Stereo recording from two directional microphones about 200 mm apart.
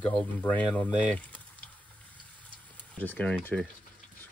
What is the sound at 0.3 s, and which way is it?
Speech, 10° left (ahead or behind).